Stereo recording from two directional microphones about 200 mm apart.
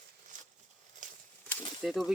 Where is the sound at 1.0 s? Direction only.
40° right (ahead or behind).